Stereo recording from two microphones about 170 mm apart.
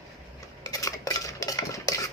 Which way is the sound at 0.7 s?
20° left (ahead or behind).